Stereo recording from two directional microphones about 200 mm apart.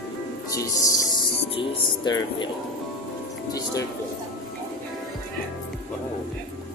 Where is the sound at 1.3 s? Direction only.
25° left (ahead or behind).